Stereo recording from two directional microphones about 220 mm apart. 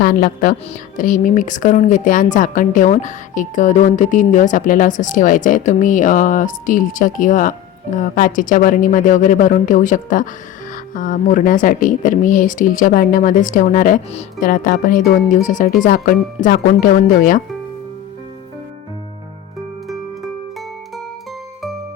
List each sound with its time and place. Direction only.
0.0 s speech: 40° left (ahead or behind)
19.9 s music: centre (ahead or behind)